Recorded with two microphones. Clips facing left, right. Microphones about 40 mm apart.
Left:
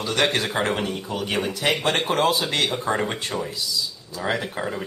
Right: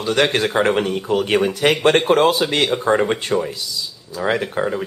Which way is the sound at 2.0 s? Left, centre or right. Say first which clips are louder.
Right 6 dB; right.